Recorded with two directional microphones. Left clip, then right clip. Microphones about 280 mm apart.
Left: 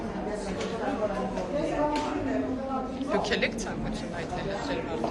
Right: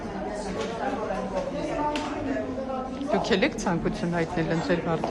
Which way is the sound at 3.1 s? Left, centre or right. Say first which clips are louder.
Right 3 dB; centre.